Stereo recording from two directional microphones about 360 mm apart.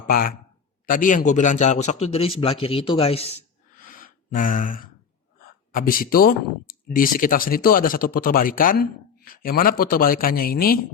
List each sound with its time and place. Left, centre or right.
0.1 s a man's voice: left